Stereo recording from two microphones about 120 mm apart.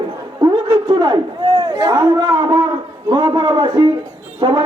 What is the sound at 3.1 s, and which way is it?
Speech, 35° right (ahead or behind).